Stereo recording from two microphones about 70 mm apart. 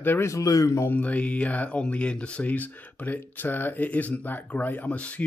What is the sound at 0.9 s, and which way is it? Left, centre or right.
Speech, centre.